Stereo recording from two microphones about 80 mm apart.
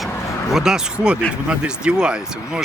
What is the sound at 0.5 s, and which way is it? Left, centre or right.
Speech, centre.